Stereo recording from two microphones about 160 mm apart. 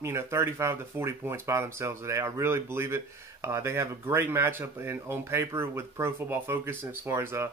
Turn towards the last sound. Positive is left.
turn(degrees=-15)  # may be behind; listen again after turning